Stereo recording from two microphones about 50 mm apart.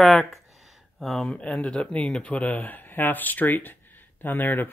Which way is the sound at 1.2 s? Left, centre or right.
Left.